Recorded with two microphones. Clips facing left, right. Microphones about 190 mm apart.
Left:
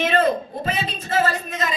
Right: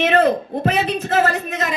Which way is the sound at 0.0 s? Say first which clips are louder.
Right 4 dB; 65° right (ahead or behind).